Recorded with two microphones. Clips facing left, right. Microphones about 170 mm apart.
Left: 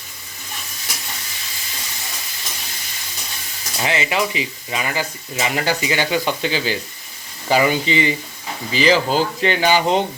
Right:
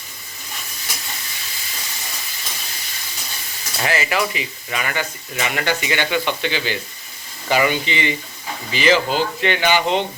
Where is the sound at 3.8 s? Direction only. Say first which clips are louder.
Even; 25° left (ahead or behind).